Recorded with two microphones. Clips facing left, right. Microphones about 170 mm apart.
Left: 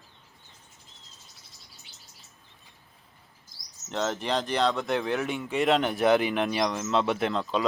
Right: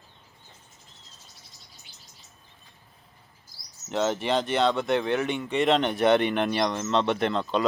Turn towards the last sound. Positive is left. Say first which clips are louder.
# right 2 dB
turn(degrees=0)  # may be behind; listen again after turning